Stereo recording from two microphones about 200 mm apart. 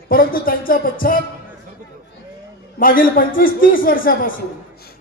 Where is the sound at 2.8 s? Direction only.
45° left (ahead or behind).